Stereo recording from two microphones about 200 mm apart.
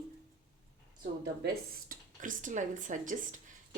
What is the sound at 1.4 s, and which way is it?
Speech, 40° right (ahead or behind).